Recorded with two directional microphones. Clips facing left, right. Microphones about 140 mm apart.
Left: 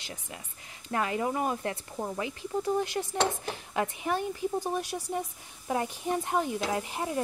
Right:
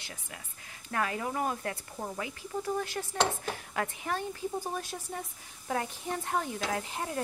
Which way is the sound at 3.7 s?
15° left (ahead or behind).